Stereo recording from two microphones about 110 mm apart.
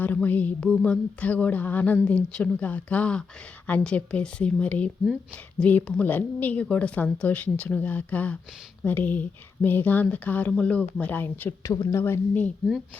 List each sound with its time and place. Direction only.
0.0 s a woman's voice: 15° left (ahead or behind)